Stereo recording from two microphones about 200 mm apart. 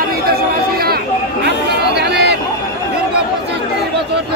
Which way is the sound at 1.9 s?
55° right (ahead or behind).